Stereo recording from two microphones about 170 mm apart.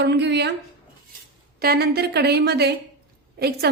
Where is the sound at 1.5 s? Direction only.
65° right (ahead or behind).